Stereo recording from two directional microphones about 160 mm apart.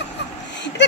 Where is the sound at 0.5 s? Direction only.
90° left.